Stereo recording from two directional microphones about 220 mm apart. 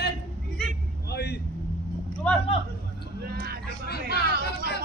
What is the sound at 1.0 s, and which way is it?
Vehicle, 45° left (ahead or behind).